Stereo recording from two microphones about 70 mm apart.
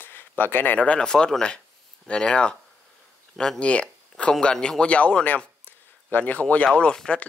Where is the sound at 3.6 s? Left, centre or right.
Centre.